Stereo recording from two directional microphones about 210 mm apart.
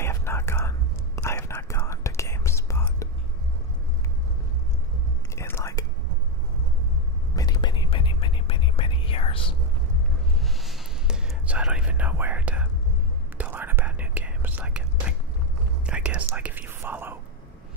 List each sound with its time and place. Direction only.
0.0 s whispering: 10° left (ahead or behind)
5.3 s whispering: 15° left (ahead or behind)
7.3 s whispering: 20° left (ahead or behind)
10.4 s whispering: centre (ahead or behind)